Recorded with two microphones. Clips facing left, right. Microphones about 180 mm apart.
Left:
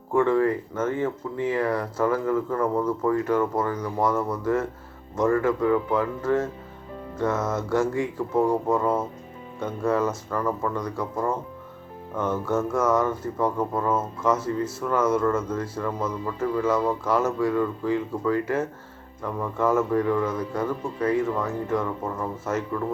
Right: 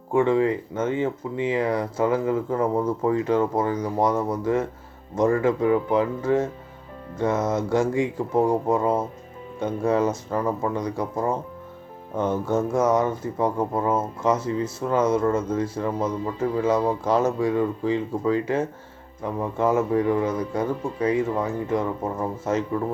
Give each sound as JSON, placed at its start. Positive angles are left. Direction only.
{"t": 0.1, "sound": "speech", "side_deg": -15}